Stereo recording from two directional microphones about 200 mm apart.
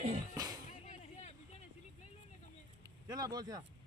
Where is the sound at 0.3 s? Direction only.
20° right (ahead or behind).